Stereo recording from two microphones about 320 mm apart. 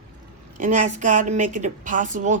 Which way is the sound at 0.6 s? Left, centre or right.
Right.